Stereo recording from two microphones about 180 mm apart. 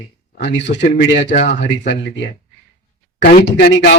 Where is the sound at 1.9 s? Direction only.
75° left (ahead or behind).